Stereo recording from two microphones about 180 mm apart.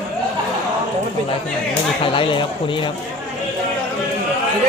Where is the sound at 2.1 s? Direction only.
25° left (ahead or behind).